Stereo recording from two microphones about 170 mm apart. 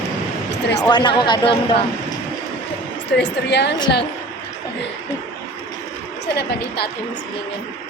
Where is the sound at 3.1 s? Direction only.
85° left.